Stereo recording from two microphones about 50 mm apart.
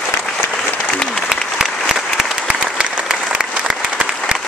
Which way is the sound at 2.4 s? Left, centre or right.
Right.